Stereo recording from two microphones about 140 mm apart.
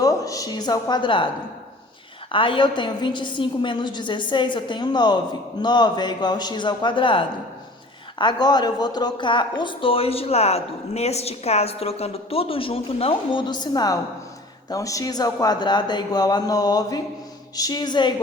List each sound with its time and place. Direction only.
0.0 s a woman's voice: 25° left (ahead or behind)
2.3 s speech: 40° left (ahead or behind)